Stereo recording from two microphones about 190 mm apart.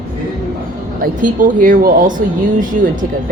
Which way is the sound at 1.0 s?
45° right (ahead or behind).